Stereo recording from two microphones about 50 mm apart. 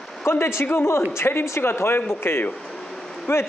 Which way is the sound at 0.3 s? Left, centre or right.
Left.